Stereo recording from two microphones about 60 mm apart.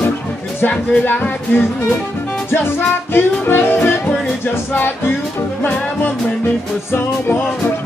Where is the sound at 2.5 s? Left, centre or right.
Left.